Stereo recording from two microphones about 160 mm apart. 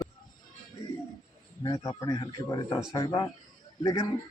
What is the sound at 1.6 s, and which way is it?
Speech, 20° left (ahead or behind).